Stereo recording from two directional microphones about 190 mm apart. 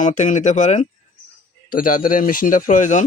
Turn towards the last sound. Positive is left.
turn(degrees=40)  # may be behind; listen again after turning